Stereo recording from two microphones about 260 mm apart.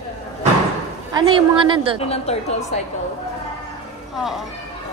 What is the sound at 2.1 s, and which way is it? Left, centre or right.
Speech, left.